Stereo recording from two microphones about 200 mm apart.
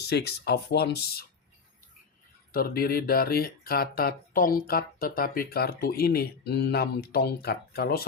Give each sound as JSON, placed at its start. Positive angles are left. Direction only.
{"t": 0.0, "sound": "speech", "side_deg": 55}
{"t": 2.5, "sound": "speech", "side_deg": 50}